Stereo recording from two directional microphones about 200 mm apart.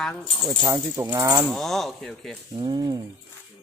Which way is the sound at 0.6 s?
10° right (ahead or behind).